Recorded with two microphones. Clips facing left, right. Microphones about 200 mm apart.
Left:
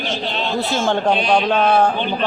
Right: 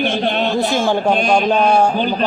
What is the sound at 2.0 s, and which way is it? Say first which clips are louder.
Speech: right 3 dB; 40° right (ahead or behind).